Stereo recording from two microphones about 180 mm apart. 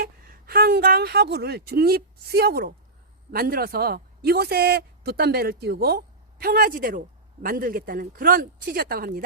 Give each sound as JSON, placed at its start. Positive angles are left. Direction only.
{"t": 0.0, "sound": "speech", "side_deg": -60}